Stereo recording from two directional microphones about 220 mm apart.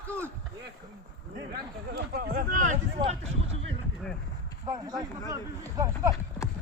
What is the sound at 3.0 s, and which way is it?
Speech, 25° right (ahead or behind).